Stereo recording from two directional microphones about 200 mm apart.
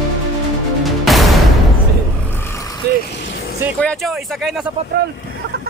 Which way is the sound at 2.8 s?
55° right (ahead or behind).